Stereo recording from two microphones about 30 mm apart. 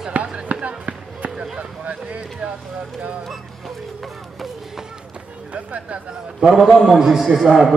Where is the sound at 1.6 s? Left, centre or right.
Right.